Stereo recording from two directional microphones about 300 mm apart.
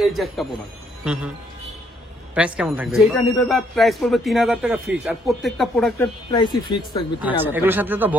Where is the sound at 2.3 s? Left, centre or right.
Centre.